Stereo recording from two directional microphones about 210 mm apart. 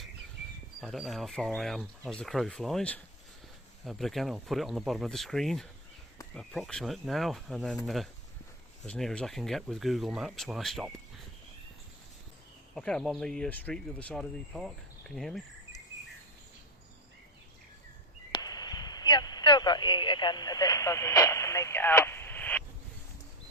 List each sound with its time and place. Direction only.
0.8 s speech: centre (ahead or behind)
12.7 s speech: 5° left (ahead or behind)
18.3 s a sound: 20° left (ahead or behind)